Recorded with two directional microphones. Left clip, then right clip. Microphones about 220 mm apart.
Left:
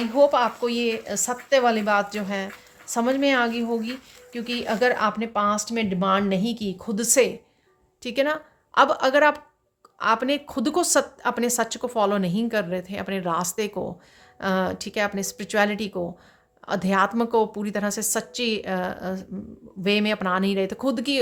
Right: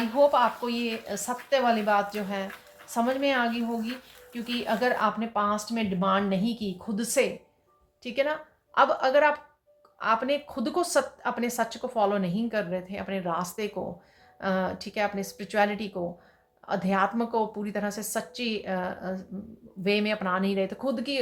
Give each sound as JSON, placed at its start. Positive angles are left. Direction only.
{"t": 0.2, "sound": "a woman's voice", "side_deg": 50}